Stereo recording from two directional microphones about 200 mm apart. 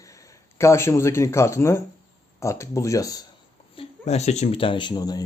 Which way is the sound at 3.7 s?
35° left (ahead or behind).